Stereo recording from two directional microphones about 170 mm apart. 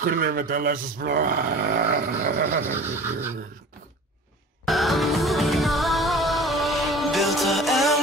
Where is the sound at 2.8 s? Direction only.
15° right (ahead or behind).